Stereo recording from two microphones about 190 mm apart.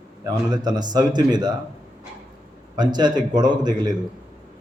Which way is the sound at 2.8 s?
20° right (ahead or behind).